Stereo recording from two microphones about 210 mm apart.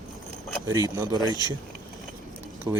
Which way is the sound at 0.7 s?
15° right (ahead or behind).